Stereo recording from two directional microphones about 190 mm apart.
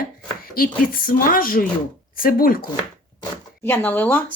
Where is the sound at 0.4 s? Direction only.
50° left (ahead or behind).